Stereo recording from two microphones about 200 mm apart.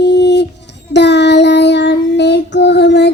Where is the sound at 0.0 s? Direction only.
60° left (ahead or behind).